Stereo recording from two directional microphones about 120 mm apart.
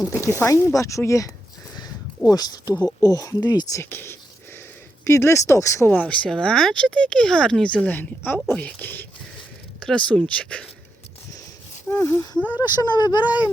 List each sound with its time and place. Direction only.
0.0 s speech: 20° right (ahead or behind)
0.3 s speech: 20° left (ahead or behind)
2.3 s speech: 35° left (ahead or behind); by 10.7 s 10° left (ahead or behind)
11.9 s speech: 20° left (ahead or behind)
12.5 s speech: 35° left (ahead or behind)